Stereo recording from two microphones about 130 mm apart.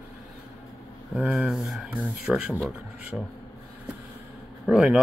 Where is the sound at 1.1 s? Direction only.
5° right (ahead or behind).